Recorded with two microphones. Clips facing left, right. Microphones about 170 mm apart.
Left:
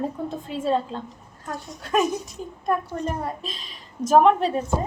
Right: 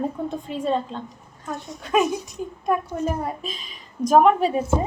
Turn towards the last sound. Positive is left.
turn(degrees=-5)  # may be behind; listen again after turning